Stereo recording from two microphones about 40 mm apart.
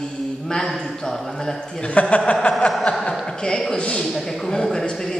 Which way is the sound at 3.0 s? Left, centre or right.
Left.